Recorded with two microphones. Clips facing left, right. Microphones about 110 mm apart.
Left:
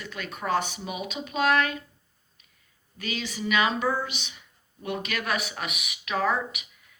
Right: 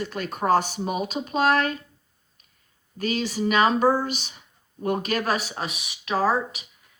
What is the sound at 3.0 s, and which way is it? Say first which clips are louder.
Speech: right 7 dB; 40° right (ahead or behind).